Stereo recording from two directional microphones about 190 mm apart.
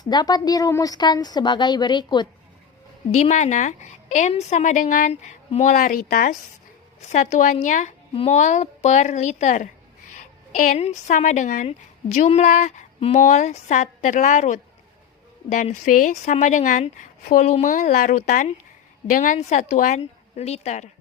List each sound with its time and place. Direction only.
0.0 s a woman's voice: 20° left (ahead or behind)
3.2 s speech: 35° left (ahead or behind)
7.1 s a woman's voice: 40° left (ahead or behind)